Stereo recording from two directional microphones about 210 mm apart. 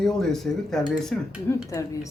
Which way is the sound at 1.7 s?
15° left (ahead or behind).